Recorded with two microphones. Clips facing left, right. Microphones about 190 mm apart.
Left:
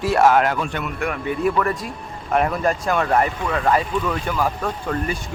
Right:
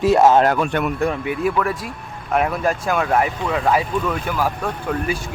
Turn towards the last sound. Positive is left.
turn(degrees=-5)  # may be behind; listen again after turning